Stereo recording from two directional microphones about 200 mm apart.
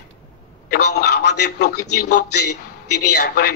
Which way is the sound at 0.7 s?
55° left (ahead or behind).